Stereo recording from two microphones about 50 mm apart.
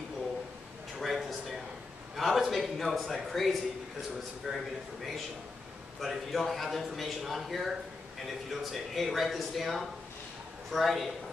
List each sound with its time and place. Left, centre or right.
0.9 s a sound: centre
2.1 s a man's voice: centre
5.9 s a man's voice: centre